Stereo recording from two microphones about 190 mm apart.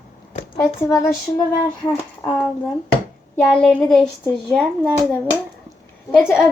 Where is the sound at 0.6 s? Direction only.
15° left (ahead or behind).